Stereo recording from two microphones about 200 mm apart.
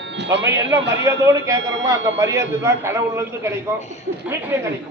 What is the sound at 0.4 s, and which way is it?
A man's voice, 15° right (ahead or behind).